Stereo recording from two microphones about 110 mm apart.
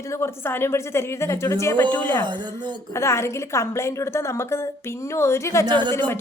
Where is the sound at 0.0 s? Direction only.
25° left (ahead or behind).